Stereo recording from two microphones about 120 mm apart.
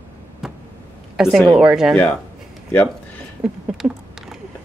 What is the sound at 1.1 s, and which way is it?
Speech, 5° right (ahead or behind).